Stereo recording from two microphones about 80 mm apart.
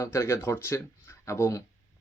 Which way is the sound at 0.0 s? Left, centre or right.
Left.